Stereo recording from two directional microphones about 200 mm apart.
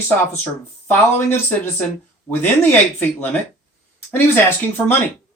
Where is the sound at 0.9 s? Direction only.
10° left (ahead or behind).